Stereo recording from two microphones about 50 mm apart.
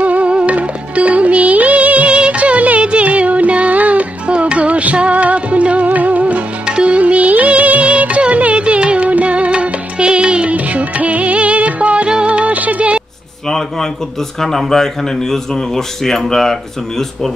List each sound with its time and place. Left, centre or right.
0.0 s music: right
13.5 s speech: centre